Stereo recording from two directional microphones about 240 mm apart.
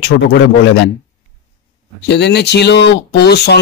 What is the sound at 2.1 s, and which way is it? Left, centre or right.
Speech, left.